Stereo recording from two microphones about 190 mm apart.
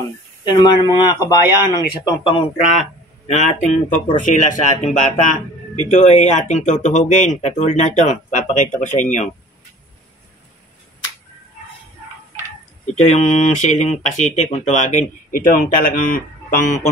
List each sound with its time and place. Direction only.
0.5 s speech: 20° left (ahead or behind); by 9.3 s 40° left (ahead or behind)
12.8 s speech: 35° left (ahead or behind)